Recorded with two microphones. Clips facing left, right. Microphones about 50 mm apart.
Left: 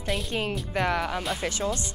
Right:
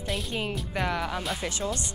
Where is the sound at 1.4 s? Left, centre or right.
Left.